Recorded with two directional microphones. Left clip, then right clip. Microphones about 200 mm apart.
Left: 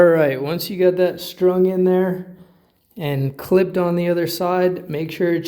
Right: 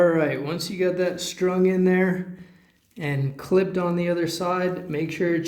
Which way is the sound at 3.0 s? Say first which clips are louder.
Left 5 dB; 40° left (ahead or behind).